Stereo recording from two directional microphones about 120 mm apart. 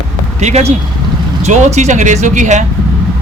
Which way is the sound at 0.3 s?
70° right (ahead or behind).